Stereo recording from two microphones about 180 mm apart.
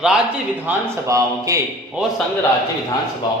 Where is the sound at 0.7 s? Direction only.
20° right (ahead or behind).